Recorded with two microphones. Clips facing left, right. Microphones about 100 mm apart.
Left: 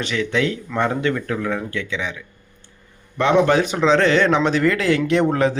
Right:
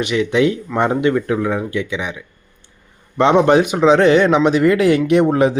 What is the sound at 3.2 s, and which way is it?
A man's voice, 25° right (ahead or behind).